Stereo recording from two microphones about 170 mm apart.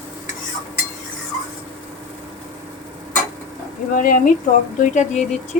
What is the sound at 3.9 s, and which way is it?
Speech, 50° left (ahead or behind).